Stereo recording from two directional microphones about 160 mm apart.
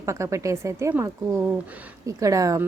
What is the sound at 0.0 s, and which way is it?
A woman's voice, 20° right (ahead or behind).